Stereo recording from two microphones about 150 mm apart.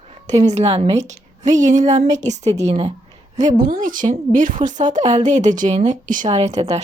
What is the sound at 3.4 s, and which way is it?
A woman's voice, 60° right (ahead or behind).